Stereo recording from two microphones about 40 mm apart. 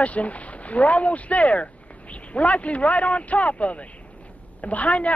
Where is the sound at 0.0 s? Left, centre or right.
Left.